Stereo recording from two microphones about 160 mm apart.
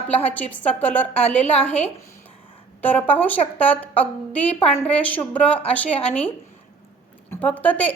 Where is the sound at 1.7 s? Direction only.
45° left (ahead or behind).